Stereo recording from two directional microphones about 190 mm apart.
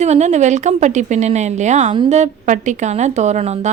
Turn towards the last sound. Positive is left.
turn(degrees=-35)  # may be behind; listen again after turning